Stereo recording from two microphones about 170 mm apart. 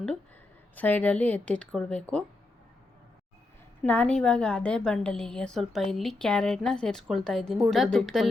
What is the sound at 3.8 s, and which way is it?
A woman's voice, 5° left (ahead or behind).